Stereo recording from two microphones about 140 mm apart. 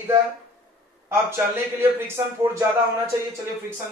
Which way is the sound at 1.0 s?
20° right (ahead or behind).